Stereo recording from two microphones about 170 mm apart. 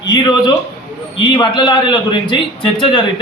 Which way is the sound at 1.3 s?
25° left (ahead or behind).